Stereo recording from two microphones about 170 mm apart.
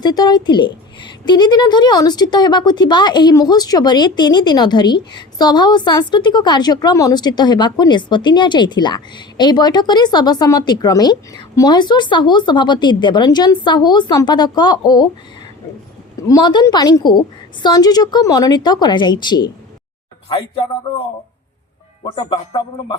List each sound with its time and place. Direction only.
0.0 s a woman's voice: 25° left (ahead or behind)
16.3 s a woman's voice: 25° left (ahead or behind)
20.9 s a woman's voice: 25° left (ahead or behind)